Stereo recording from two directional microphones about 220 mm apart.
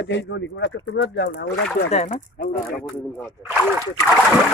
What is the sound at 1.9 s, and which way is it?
Speech, 30° left (ahead or behind).